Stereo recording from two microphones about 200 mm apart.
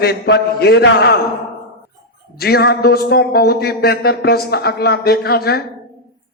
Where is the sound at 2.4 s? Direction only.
50° left (ahead or behind).